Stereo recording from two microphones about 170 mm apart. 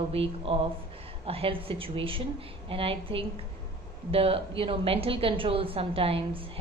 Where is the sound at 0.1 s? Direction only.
35° right (ahead or behind).